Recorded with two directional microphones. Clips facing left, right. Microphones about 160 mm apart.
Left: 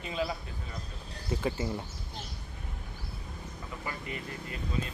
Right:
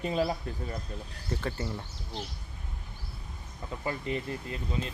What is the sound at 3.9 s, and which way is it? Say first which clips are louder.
Speech: right 7 dB; 25° right (ahead or behind).